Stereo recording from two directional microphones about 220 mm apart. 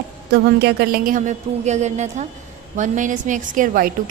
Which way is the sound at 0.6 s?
45° right (ahead or behind).